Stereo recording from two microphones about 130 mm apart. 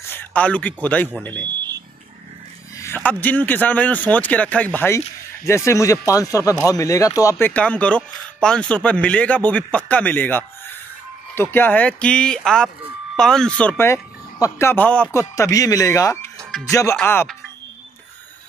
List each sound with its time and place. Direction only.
0.1 s a man's voice: 15° left (ahead or behind)
2.8 s speech: 15° left (ahead or behind)
11.5 s speech: 15° left (ahead or behind)
15.1 s speech: 25° left (ahead or behind)
16.5 s speech: 5° left (ahead or behind)
17.0 s speech: 15° left (ahead or behind)